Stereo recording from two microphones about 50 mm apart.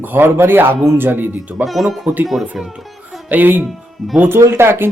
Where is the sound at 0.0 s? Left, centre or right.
Right.